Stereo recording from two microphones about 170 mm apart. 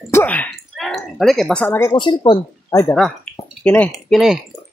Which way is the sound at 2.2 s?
20° left (ahead or behind).